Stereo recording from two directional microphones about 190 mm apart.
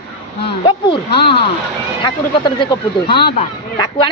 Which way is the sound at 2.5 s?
25° left (ahead or behind).